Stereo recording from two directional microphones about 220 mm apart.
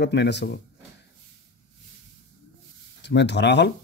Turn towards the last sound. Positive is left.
turn(degrees=50)  # may be behind; listen again after turning